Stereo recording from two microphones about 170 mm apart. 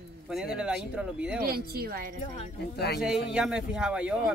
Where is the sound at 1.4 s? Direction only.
65° right (ahead or behind).